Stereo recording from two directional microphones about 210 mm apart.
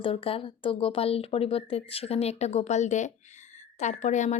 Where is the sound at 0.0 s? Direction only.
25° left (ahead or behind).